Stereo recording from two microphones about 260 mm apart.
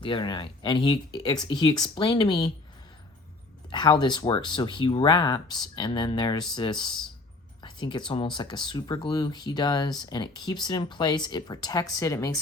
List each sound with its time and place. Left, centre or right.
0.0 s speech: centre
3.7 s speech: centre